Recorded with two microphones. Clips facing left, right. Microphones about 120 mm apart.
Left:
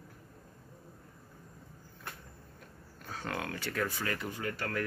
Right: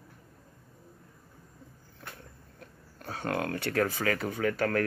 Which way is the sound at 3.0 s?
60° right (ahead or behind).